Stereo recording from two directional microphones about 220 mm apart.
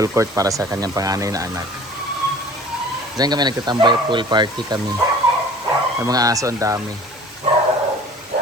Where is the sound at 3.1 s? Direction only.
20° right (ahead or behind).